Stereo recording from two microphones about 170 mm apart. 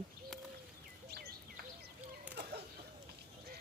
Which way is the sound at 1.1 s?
65° right (ahead or behind).